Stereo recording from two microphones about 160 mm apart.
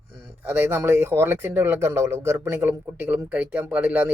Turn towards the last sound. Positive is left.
turn(degrees=-10)  # may be behind; listen again after turning